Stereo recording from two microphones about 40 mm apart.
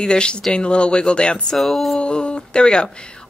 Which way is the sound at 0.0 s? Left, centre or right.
Left.